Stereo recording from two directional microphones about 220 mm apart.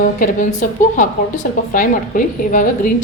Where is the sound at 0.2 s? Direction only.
35° left (ahead or behind).